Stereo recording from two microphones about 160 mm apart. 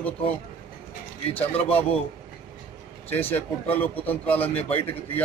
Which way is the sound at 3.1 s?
10° left (ahead or behind).